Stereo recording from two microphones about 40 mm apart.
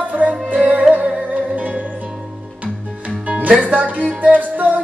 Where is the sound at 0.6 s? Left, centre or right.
Right.